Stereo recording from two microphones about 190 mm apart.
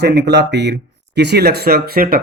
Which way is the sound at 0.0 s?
60° right (ahead or behind).